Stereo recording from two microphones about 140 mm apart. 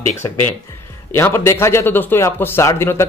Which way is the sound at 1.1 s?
15° left (ahead or behind).